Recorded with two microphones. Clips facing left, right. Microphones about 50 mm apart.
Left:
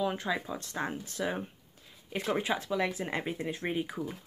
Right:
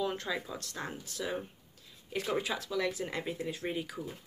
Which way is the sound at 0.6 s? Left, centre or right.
Left.